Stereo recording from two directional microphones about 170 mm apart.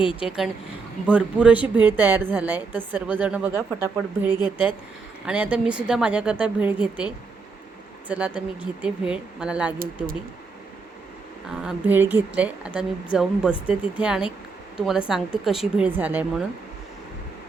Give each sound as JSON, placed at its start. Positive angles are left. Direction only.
{"t": 0.2, "sound": "a woman's voice", "side_deg": -5}
{"t": 4.4, "sound": "a woman's voice", "side_deg": 25}
{"t": 5.2, "sound": "a woman's voice", "side_deg": -5}
{"t": 11.4, "sound": "a woman's voice", "side_deg": -10}